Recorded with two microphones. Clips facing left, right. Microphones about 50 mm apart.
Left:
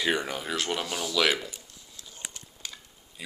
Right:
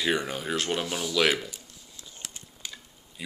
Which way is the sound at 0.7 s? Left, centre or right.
Centre.